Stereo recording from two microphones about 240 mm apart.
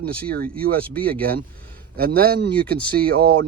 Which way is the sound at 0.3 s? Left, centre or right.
Right.